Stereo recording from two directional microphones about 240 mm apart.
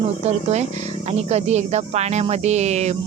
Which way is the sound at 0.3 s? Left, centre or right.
Right.